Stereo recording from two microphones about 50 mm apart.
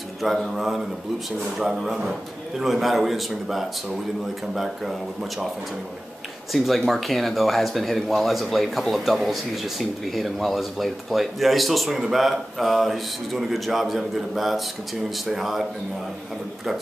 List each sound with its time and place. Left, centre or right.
0.2 s speech: centre
6.5 s speech: centre